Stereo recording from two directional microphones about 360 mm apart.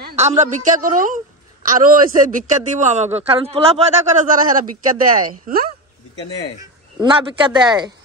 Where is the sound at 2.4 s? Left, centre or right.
Right.